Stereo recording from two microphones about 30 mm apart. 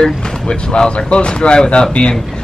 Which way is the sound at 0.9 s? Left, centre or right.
Left.